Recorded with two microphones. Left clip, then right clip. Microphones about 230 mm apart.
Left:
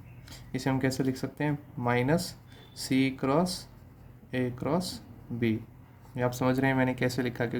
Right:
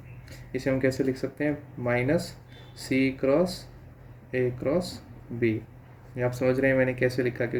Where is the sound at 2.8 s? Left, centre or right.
Left.